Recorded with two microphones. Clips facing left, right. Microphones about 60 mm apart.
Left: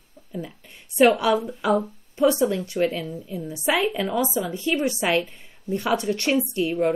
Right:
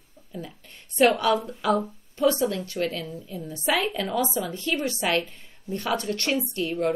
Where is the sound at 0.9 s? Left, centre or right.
Centre.